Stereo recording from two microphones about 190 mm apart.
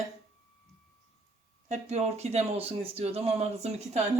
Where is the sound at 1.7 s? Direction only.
35° right (ahead or behind).